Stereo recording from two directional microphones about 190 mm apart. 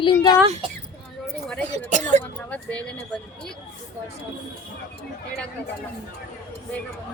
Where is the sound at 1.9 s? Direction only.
40° right (ahead or behind).